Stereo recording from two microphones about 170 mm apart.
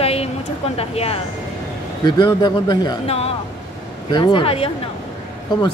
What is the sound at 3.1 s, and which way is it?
Speech, 35° left (ahead or behind).